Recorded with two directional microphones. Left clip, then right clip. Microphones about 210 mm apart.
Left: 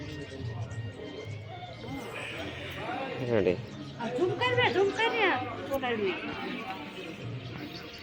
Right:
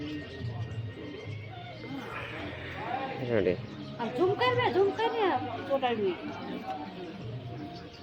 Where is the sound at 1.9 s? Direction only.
Centre (ahead or behind).